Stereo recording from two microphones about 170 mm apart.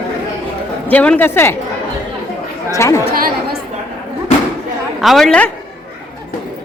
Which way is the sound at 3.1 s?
60° right (ahead or behind).